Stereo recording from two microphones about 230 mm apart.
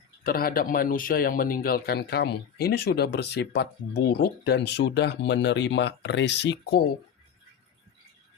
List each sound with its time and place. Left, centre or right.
0.3 s speech: left